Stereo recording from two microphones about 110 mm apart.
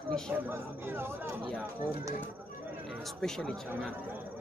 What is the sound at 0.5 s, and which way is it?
Speech, 20° right (ahead or behind).